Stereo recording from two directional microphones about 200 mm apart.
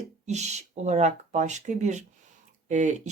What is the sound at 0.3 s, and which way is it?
Speech, 35° right (ahead or behind).